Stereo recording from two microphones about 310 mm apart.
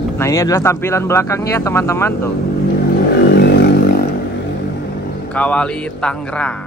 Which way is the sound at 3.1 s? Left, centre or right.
Left.